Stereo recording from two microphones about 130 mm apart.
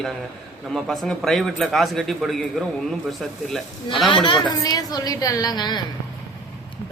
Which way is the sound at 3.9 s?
40° left (ahead or behind).